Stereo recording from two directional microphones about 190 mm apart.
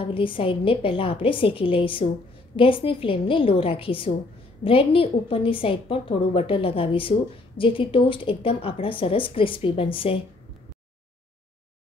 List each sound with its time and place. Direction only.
0.0 s a woman's voice: 25° left (ahead or behind)